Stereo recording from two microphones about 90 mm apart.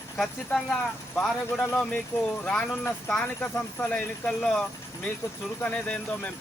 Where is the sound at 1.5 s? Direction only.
25° left (ahead or behind).